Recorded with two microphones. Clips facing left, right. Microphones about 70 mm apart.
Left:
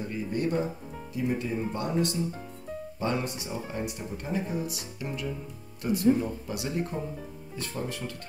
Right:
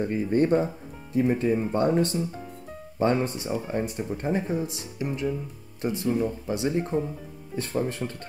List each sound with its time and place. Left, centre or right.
0.0 s speech: right